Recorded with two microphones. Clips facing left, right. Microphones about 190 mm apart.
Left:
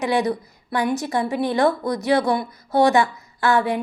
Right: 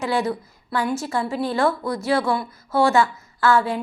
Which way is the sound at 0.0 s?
15° left (ahead or behind).